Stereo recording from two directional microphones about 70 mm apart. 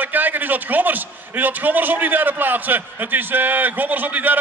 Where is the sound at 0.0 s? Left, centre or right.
Right.